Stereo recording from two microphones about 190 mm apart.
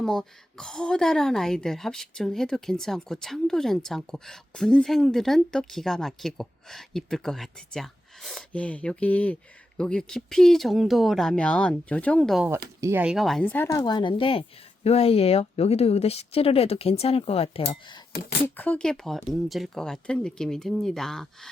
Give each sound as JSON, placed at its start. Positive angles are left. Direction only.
{"t": 0.0, "sound": "a woman's voice", "side_deg": 5}
{"t": 12.8, "sound": "a woman's voice", "side_deg": -10}
{"t": 18.4, "sound": "a woman's voice", "side_deg": 10}